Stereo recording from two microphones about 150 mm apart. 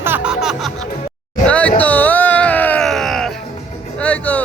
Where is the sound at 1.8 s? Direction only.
10° left (ahead or behind).